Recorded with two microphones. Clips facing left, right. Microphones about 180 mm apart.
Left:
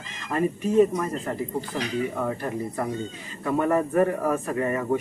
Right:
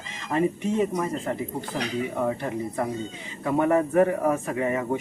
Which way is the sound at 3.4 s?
15° right (ahead or behind).